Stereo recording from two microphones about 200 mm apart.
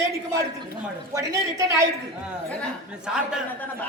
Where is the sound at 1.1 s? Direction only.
15° right (ahead or behind).